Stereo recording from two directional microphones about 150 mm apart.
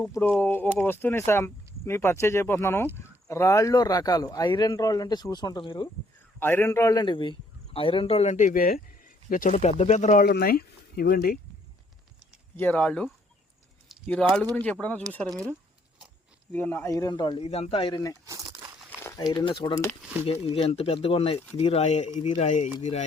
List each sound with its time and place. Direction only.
0.0 s speech: 15° left (ahead or behind); by 5.9 s 30° left (ahead or behind)
6.4 s a man's voice: 15° left (ahead or behind); by 8.8 s 70° left (ahead or behind)
9.3 s speech: 60° left (ahead or behind)
10.2 s speech: 90° left
12.5 s speech: 10° left (ahead or behind)
14.5 s speech: 10° left (ahead or behind)
16.5 s speech: 15° left (ahead or behind); by 17.4 s 30° left (ahead or behind)
17.4 s a man's voice: 40° left (ahead or behind); by 18.2 s 25° left (ahead or behind)
18.3 s crumpling: 25° right (ahead or behind)
18.9 s crumpling: 20° left (ahead or behind)
19.4 s a man's voice: 30° left (ahead or behind); by 23.0 s 50° left (ahead or behind)